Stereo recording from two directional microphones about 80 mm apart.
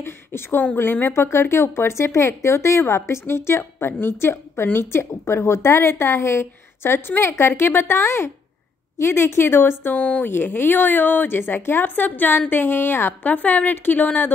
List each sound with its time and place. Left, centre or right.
0.0 s a woman's voice: left